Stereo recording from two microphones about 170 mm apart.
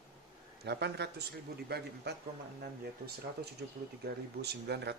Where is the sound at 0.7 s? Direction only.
85° right.